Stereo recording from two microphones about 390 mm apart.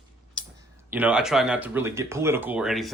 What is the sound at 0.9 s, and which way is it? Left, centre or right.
Speech, centre.